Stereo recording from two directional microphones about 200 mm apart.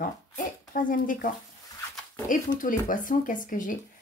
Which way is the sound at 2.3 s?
40° left (ahead or behind).